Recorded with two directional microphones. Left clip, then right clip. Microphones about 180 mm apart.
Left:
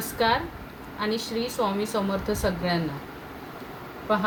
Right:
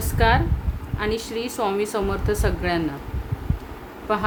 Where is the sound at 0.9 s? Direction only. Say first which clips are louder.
Right 2 dB; 45° right (ahead or behind).